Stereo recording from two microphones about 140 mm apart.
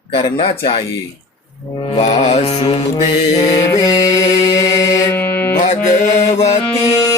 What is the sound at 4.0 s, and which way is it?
Music, 25° left (ahead or behind).